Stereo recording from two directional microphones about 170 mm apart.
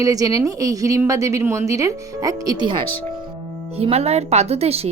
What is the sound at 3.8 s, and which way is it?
A woman's voice, 35° right (ahead or behind).